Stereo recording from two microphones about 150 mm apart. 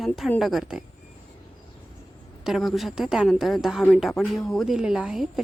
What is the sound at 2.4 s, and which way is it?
Speech, centre (ahead or behind).